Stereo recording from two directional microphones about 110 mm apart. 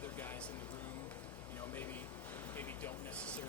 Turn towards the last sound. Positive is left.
turn(degrees=10)  # may be behind; listen again after turning